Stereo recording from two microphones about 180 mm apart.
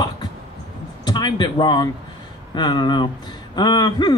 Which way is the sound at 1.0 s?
25° left (ahead or behind).